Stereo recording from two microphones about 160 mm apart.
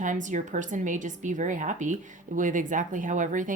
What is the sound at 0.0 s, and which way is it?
Speech, 50° right (ahead or behind).